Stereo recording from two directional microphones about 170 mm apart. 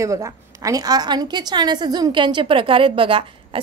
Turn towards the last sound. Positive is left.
turn(degrees=-30)  # may be behind; listen again after turning